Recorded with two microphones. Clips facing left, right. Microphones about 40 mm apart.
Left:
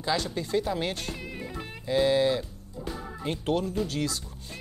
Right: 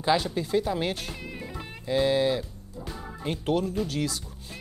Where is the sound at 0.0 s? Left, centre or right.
Centre.